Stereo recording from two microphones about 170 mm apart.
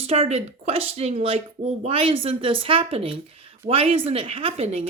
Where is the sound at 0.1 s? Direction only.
40° right (ahead or behind).